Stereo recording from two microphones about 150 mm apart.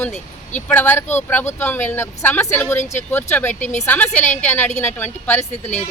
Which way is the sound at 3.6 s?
55° left (ahead or behind).